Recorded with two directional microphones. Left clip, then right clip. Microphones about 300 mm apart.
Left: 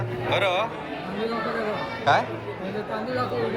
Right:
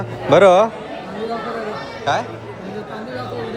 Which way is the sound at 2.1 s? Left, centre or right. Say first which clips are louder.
Right 1 dB; centre.